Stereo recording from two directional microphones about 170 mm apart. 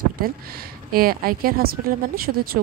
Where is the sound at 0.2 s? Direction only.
60° right (ahead or behind).